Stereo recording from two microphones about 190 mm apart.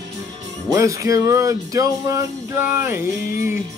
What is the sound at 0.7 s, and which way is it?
Music, 15° right (ahead or behind).